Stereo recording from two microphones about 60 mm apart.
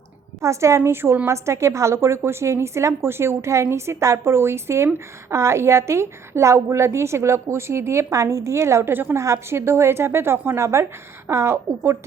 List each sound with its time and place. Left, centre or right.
0.4 s a woman's voice: right
0.9 s a woman's voice: right
1.3 s a woman's voice: right
8.9 s a woman's voice: right
9.1 s a woman's voice: right